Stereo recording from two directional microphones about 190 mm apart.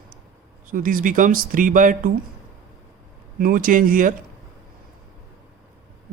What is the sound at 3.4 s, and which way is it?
Speech, 50° right (ahead or behind).